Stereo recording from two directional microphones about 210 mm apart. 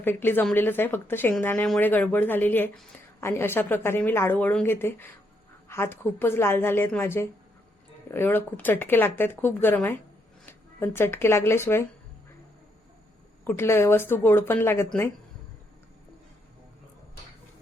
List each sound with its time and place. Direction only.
0.0 s speech: 10° left (ahead or behind)
13.4 s speech: 10° left (ahead or behind)